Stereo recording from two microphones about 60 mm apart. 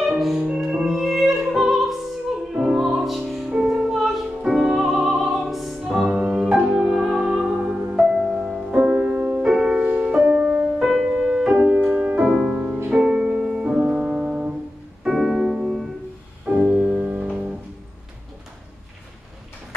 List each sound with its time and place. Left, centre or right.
0.0 s music: centre
3.4 s music: centre
3.9 s music: centre
8.7 s music: centre
9.4 s music: centre
9.8 s music: right
10.8 s music: centre
11.1 s music: centre
15.0 s piano: centre
16.6 s music: centre